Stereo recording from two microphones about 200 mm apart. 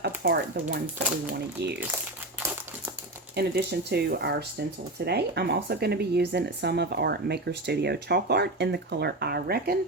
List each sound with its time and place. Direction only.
0.0 s speech: 55° right (ahead or behind)
3.3 s speech: 55° right (ahead or behind)